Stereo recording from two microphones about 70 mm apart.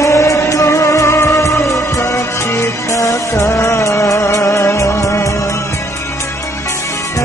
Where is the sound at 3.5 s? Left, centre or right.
Left.